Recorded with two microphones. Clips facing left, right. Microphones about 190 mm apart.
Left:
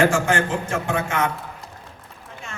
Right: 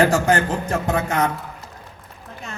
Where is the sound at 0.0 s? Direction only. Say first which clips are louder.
Right 2 dB; 35° right (ahead or behind).